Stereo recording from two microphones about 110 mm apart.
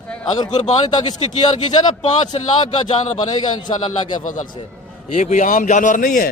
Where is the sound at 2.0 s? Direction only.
90° left.